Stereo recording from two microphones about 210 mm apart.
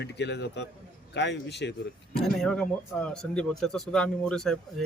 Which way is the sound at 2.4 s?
5° left (ahead or behind).